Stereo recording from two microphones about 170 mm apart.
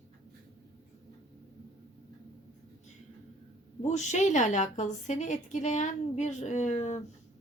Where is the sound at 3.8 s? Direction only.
45° left (ahead or behind).